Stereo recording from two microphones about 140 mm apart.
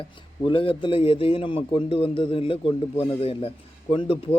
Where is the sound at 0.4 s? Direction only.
40° left (ahead or behind).